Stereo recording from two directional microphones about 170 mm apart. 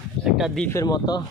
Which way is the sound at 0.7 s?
20° left (ahead or behind).